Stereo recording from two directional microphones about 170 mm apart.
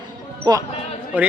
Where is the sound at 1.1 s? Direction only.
10° right (ahead or behind).